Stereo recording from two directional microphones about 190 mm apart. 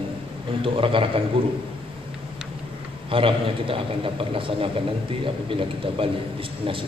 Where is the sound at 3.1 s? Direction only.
30° right (ahead or behind).